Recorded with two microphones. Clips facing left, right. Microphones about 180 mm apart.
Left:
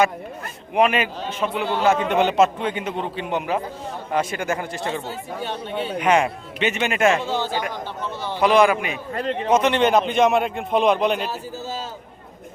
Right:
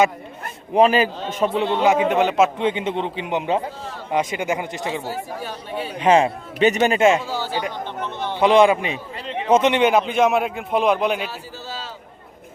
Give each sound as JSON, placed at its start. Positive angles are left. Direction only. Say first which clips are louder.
{"t": 0.7, "sound": "a man's voice", "louder": "right 4 dB", "side_deg": -30}
{"t": 1.6, "sound": "speech", "louder": "right 1 dB", "side_deg": -20}
{"t": 2.0, "sound": "a man's voice", "louder": "even", "side_deg": 0}
{"t": 2.6, "sound": "a man's voice", "louder": "right 4 dB", "side_deg": -20}
{"t": 5.0, "sound": "speech", "louder": "even", "side_deg": 25}
{"t": 6.0, "sound": "a man's voice", "louder": "right 4 dB", "side_deg": -25}
{"t": 7.2, "sound": "speech", "louder": "left 2 dB", "side_deg": 20}
{"t": 8.4, "sound": "a man's voice", "louder": "right 2 dB", "side_deg": -25}
{"t": 9.1, "sound": "a man's voice", "louder": "left 4 dB", "side_deg": 50}
{"t": 9.5, "sound": "a man's voice", "louder": "right 3 dB", "side_deg": -25}
{"t": 9.7, "sound": "a man's voice", "louder": "even", "side_deg": -10}
{"t": 11.3, "sound": "a man's voice", "louder": "left 4 dB", "side_deg": 45}